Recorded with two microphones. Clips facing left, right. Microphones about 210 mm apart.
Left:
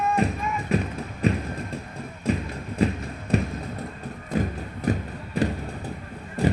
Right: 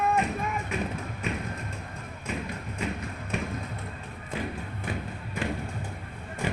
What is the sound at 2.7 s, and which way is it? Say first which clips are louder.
Thump: left 10 dB; 35° left (ahead or behind).